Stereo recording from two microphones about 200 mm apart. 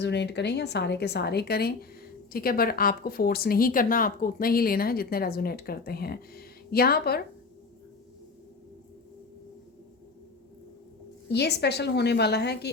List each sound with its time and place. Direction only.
0.0 s a woman's voice: 60° left (ahead or behind)
11.3 s a woman's voice: 55° left (ahead or behind)